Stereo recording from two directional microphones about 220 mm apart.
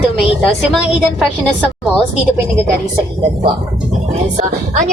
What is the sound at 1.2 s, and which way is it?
Speech, centre (ahead or behind).